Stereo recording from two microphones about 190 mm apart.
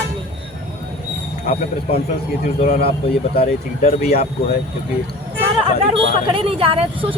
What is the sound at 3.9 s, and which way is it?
Speech, 50° left (ahead or behind).